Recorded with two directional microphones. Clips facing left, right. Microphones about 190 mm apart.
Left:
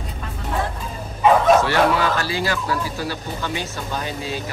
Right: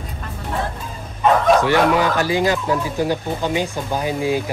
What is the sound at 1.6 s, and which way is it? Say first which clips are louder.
Speech: right 2 dB; 15° right (ahead or behind).